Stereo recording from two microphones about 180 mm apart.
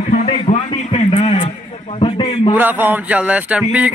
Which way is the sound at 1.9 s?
30° left (ahead or behind).